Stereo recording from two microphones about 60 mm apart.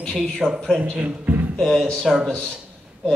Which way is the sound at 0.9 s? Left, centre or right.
Right.